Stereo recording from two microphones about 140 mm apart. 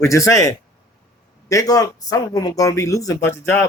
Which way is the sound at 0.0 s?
20° left (ahead or behind).